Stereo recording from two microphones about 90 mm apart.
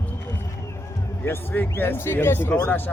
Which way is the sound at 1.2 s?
25° left (ahead or behind).